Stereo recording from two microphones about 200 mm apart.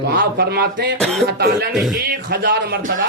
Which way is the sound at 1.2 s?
55° right (ahead or behind).